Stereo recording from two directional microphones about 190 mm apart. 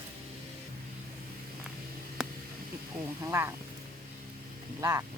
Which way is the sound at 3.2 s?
15° right (ahead or behind).